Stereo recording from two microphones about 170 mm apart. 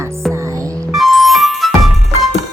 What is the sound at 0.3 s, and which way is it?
Music, 20° right (ahead or behind).